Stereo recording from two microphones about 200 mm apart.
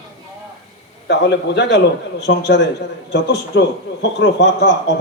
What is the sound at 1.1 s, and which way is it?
A man's voice, 60° left (ahead or behind).